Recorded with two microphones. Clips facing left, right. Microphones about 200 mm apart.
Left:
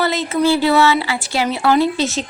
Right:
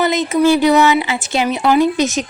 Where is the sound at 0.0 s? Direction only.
15° right (ahead or behind).